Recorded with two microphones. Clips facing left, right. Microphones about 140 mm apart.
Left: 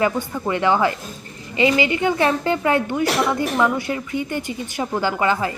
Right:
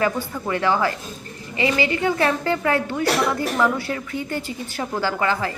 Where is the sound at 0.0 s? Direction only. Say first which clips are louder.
Left 2 dB; 20° left (ahead or behind).